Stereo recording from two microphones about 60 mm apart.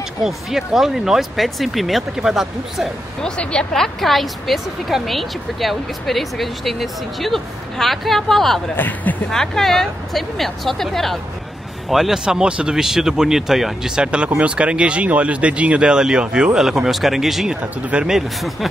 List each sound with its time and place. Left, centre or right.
0.2 s speech: centre
3.2 s speech: centre
8.7 s speech: left
9.3 s speech: centre
11.9 s speech: centre